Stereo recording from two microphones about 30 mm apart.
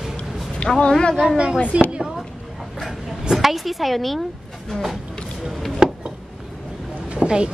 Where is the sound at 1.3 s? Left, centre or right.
Right.